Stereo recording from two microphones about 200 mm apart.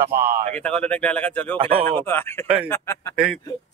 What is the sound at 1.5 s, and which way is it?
Speech, 25° right (ahead or behind).